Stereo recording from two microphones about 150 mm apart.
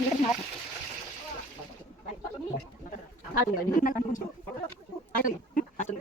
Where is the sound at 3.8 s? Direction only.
65° left (ahead or behind).